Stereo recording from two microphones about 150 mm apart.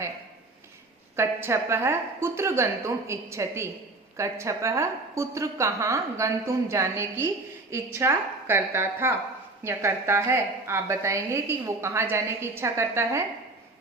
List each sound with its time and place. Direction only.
1.1 s a woman's voice: 15° right (ahead or behind)